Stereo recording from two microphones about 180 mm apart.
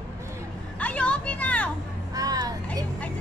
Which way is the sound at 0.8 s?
5° left (ahead or behind).